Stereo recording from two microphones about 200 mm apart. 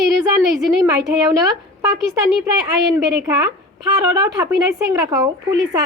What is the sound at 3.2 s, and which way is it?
Speech, 5° right (ahead or behind).